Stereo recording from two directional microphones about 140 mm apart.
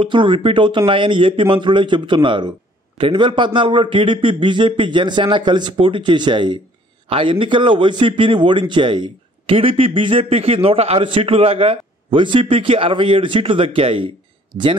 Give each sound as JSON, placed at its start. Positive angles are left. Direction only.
{"t": 0.0, "sound": "a man's voice", "side_deg": -35}